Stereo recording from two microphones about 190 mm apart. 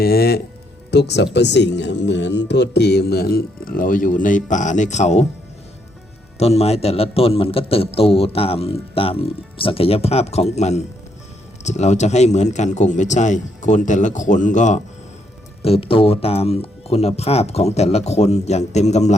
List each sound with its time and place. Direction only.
0.0 s speech: 55° left (ahead or behind); by 5.2 s 40° left (ahead or behind)
6.4 s a man's voice: 35° left (ahead or behind)